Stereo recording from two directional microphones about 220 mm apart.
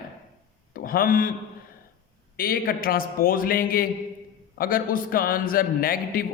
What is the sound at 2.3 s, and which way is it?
A man's voice, 40° left (ahead or behind).